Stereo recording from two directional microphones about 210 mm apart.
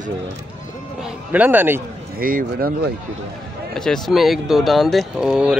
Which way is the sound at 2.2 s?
40° right (ahead or behind).